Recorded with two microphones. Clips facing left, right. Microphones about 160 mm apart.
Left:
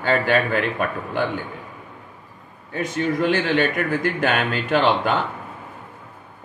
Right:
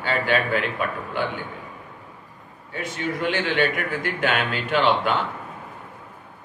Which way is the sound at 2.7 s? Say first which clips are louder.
Left 5 dB; 45° left (ahead or behind).